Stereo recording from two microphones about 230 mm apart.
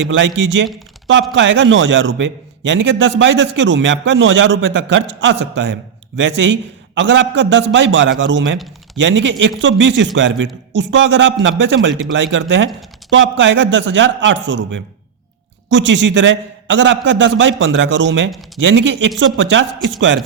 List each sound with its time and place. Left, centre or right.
0.1 s a man's voice: right